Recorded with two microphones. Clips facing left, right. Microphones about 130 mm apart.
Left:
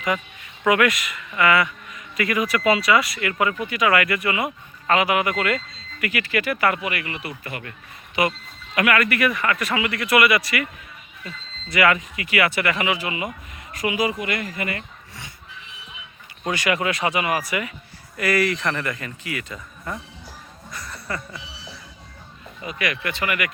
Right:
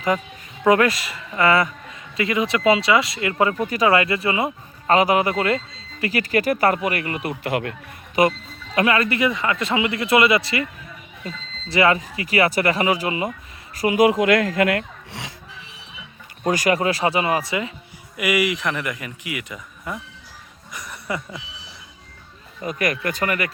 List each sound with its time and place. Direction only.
0.6 s a man's voice: 30° right (ahead or behind)
7.4 s speech: 75° right (ahead or behind)
8.2 s a man's voice: 40° right (ahead or behind)
8.7 s speech: 30° right (ahead or behind)
11.7 s a man's voice: 30° right (ahead or behind)
14.0 s speech: 80° right
16.4 s a man's voice: 40° right (ahead or behind); by 17.7 s 25° right (ahead or behind)
18.2 s speech: 15° right (ahead or behind)
20.7 s a sound: 15° right (ahead or behind)
22.6 s speech: 45° right (ahead or behind)